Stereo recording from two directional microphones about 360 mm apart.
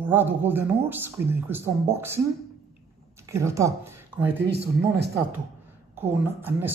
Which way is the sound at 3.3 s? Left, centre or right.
Centre.